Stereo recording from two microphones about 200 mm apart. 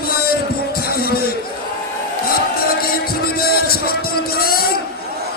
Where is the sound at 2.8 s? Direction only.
50° left (ahead or behind).